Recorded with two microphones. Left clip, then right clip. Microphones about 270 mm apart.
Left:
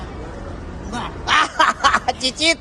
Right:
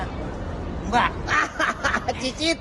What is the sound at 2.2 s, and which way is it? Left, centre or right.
Speech, centre.